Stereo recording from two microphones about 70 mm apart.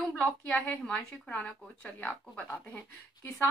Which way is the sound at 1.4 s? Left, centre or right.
Centre.